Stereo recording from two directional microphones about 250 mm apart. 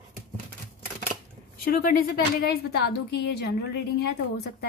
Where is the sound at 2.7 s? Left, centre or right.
Left.